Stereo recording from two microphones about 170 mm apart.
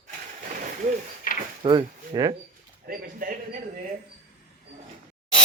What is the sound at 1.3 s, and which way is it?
Drawer open or close, 55° left (ahead or behind).